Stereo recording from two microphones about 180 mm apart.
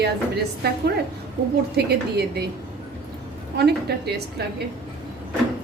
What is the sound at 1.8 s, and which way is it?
Speech, 65° right (ahead or behind).